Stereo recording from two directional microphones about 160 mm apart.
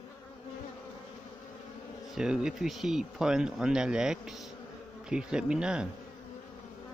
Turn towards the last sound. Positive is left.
turn(degrees=-5)  # may be behind; listen again after turning